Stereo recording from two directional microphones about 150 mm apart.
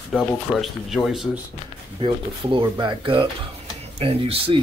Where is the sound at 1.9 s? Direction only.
35° right (ahead or behind).